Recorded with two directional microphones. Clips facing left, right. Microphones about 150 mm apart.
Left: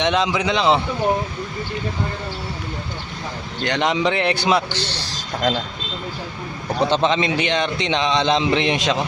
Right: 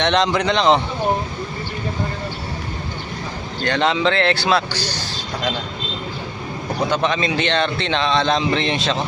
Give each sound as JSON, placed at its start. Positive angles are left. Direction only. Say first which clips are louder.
{"t": 0.0, "sound": "a man's voice", "louder": "right 2 dB", "side_deg": 5}
{"t": 3.6, "sound": "a man's voice", "louder": "right 1 dB", "side_deg": 15}
{"t": 6.9, "sound": "a man's voice", "louder": "left 1 dB", "side_deg": 20}